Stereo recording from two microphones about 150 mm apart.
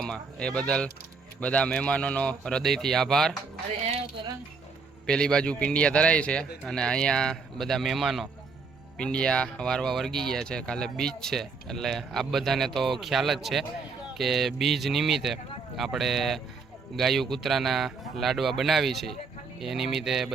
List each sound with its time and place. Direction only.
0.0 s speech: 5° left (ahead or behind)
5.0 s speech: 5° left (ahead or behind)